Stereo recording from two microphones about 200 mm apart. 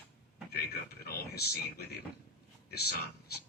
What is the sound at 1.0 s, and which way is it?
Speech, 50° left (ahead or behind).